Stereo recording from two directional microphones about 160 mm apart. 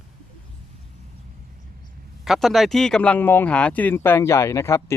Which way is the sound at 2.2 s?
Centre (ahead or behind).